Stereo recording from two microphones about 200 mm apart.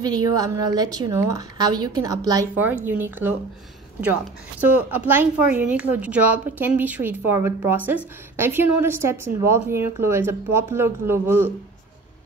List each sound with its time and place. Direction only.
0.0 s a woman's voice: 20° right (ahead or behind)
4.9 s a woman's voice: 10° right (ahead or behind)